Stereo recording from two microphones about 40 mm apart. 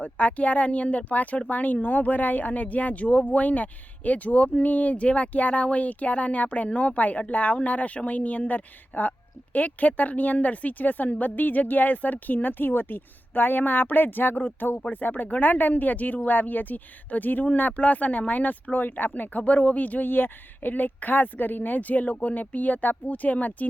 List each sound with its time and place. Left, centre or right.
0.0 s speech: left